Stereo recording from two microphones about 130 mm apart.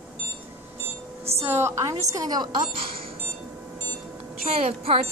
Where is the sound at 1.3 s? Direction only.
20° right (ahead or behind); by 3.0 s 40° right (ahead or behind).